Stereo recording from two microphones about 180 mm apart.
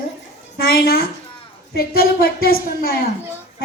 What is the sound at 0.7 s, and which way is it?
A woman's voice, 55° left (ahead or behind).